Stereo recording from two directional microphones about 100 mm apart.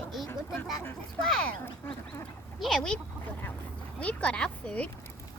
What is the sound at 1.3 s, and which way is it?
Speech, 10° left (ahead or behind).